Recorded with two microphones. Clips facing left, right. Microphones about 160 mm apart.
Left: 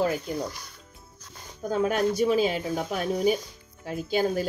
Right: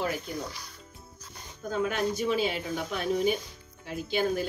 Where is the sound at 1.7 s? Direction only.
40° left (ahead or behind).